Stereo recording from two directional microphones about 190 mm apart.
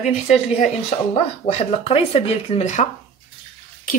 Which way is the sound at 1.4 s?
30° left (ahead or behind).